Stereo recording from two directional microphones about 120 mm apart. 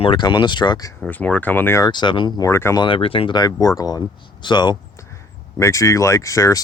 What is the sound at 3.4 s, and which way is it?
Speech, 30° left (ahead or behind).